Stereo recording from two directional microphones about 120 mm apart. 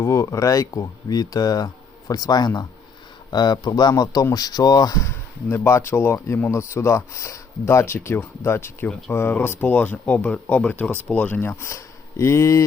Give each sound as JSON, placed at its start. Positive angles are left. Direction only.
{"t": 0.0, "sound": "speech", "side_deg": 25}
{"t": 8.9, "sound": "speech", "side_deg": 5}
{"t": 9.1, "sound": "speech", "side_deg": 20}